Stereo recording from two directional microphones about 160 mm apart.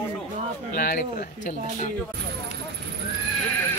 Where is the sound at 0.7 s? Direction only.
60° left (ahead or behind).